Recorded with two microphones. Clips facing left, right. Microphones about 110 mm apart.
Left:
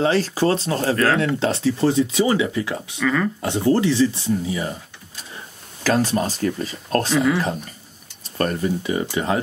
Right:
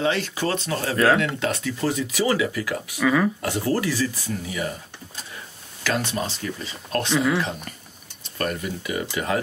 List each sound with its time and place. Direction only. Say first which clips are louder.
0.0 s speech: left 5 dB; 35° left (ahead or behind)
0.9 s speech: right 3 dB; 5° right (ahead or behind)
1.2 s speech: left 5 dB; 30° left (ahead or behind)
3.0 s speech: right 1 dB; 10° right (ahead or behind)
3.4 s speech: left 5 dB; 25° left (ahead or behind)
5.9 s speech: left 6 dB; 35° left (ahead or behind)
7.1 s speech: left 1 dB; centre (ahead or behind)
8.4 s speech: left 6 dB; 35° left (ahead or behind)